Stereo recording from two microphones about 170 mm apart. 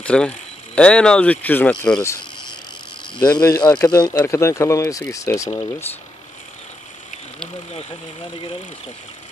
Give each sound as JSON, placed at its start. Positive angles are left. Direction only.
{"t": 0.0, "sound": "speech", "side_deg": 5}
{"t": 3.3, "sound": "speech", "side_deg": 20}